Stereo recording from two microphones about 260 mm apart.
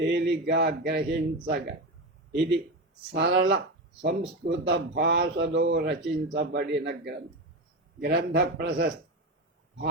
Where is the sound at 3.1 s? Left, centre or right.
Right.